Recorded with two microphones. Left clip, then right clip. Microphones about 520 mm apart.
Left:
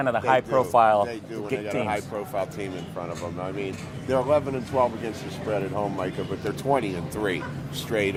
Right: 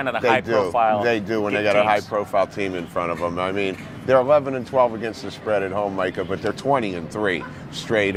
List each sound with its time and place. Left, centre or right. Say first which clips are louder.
0.0 s speech: right 2 dB; left
1.0 s speech: right 10 dB; right